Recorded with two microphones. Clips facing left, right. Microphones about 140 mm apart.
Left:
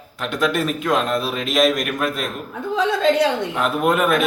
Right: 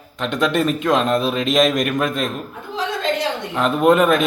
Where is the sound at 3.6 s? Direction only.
5° left (ahead or behind).